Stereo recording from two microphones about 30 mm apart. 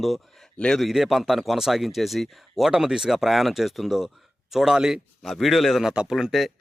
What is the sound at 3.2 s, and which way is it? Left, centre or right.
A man's voice, centre.